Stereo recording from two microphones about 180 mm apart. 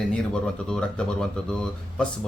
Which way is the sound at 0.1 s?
5° left (ahead or behind).